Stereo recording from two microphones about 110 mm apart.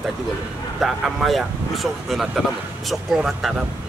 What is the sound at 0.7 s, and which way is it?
Speech, centre (ahead or behind).